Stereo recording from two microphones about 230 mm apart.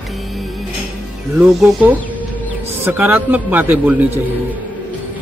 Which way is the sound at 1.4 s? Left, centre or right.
Centre.